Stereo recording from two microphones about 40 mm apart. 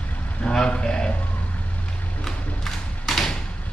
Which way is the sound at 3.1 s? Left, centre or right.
Centre.